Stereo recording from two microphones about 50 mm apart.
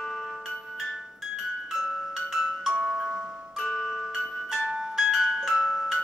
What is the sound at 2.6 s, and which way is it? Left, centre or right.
Music, centre.